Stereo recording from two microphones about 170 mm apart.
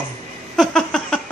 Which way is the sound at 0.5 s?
5° left (ahead or behind).